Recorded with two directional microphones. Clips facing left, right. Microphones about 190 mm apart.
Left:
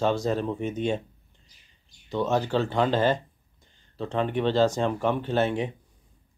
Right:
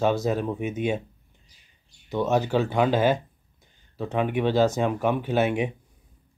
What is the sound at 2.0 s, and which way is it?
Speech, 5° right (ahead or behind).